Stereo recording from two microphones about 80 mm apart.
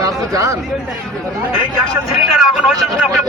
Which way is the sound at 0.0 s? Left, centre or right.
Right.